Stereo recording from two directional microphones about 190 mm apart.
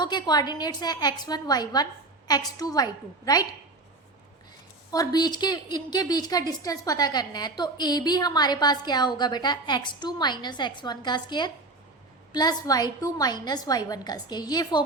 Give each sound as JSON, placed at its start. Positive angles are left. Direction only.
{"t": 0.0, "sound": "a woman's voice", "side_deg": 25}
{"t": 4.9, "sound": "a woman's voice", "side_deg": 20}